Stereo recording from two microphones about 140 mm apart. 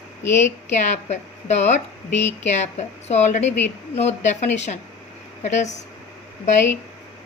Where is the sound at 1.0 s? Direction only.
55° left (ahead or behind).